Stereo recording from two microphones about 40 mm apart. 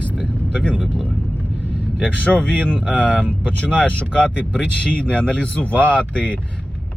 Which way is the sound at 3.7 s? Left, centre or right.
Left.